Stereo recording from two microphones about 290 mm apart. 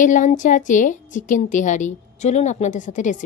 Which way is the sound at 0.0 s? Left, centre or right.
Left.